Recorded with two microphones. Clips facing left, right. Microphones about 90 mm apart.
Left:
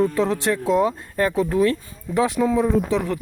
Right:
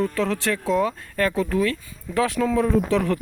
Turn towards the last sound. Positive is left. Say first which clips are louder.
# even
turn(degrees=15)  # may be behind; listen again after turning